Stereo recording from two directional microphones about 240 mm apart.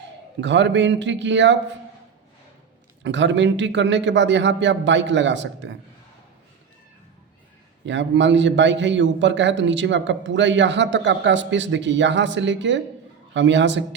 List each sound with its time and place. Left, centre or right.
0.4 s a man's voice: right
3.0 s a man's voice: right
7.9 s a man's voice: right